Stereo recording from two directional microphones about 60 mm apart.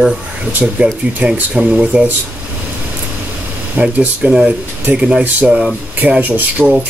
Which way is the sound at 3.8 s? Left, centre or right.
Right.